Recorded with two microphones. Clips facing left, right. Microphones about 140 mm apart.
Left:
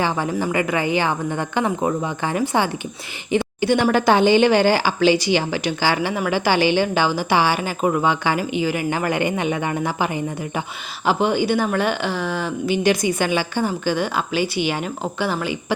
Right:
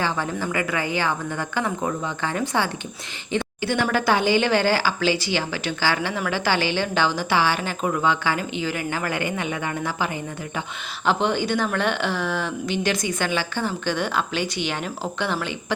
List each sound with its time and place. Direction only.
0.0 s a woman's voice: 15° left (ahead or behind)